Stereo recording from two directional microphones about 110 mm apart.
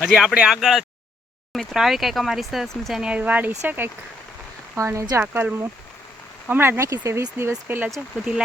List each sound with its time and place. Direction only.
0.0 s speech: 5° right (ahead or behind); by 5.2 s 25° right (ahead or behind)
5.2 s speech: 15° right (ahead or behind)